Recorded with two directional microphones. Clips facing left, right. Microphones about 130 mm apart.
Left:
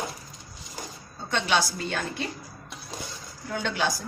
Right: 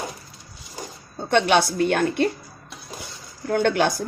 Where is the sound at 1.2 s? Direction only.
60° right (ahead or behind).